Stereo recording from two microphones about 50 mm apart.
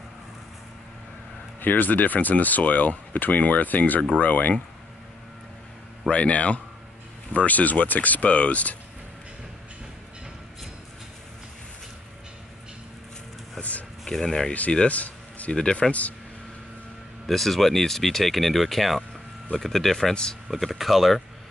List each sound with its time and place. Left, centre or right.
1.6 s speech: left
6.0 s a man's voice: left
13.6 s a sound: left
14.0 s speech: centre
14.9 s a sound: left
15.5 s a man's voice: centre
17.3 s speech: centre
20.4 s speech: centre